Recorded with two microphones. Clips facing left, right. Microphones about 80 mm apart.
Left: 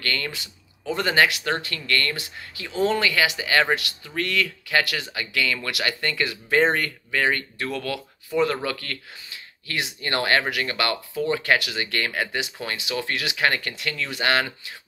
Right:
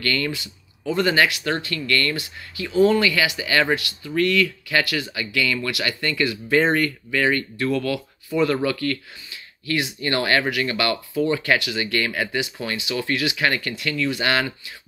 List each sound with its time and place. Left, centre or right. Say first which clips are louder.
0.0 s speech: right 4 dB; left